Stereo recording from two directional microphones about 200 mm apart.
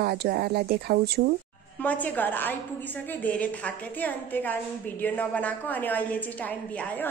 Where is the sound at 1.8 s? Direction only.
10° left (ahead or behind).